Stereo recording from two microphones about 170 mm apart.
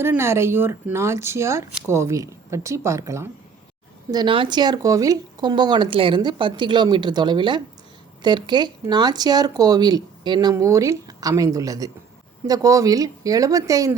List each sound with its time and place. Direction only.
0.0 s speech: 15° right (ahead or behind)
4.1 s speech: 25° right (ahead or behind)